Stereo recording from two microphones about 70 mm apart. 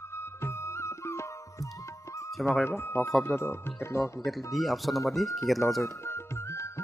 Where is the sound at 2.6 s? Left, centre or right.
Left.